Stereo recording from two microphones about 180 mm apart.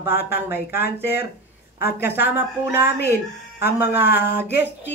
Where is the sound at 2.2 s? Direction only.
10° right (ahead or behind).